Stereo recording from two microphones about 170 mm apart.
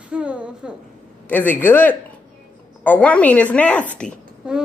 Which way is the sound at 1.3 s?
10° left (ahead or behind).